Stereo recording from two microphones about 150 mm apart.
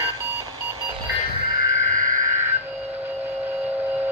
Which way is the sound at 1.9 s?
60° right (ahead or behind).